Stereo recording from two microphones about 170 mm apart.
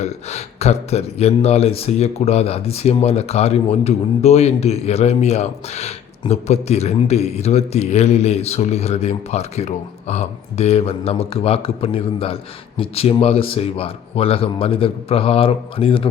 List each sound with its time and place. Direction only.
0.0 s speech: 40° left (ahead or behind)